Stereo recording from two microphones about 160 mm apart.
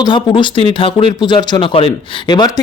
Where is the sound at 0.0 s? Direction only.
30° left (ahead or behind).